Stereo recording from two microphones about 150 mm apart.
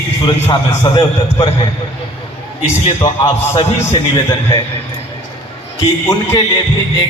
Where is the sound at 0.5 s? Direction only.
30° left (ahead or behind).